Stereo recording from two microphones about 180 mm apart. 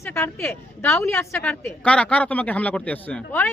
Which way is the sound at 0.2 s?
15° left (ahead or behind).